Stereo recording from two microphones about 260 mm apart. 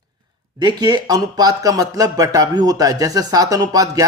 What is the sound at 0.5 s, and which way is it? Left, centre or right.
Speech, centre.